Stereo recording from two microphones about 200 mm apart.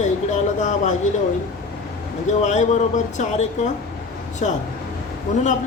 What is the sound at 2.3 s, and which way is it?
A man's voice, 35° left (ahead or behind).